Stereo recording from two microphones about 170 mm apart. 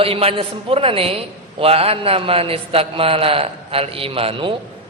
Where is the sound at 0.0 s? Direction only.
35° right (ahead or behind).